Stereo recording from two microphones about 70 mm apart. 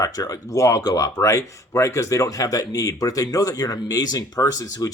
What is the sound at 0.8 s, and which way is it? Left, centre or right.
Speech, left.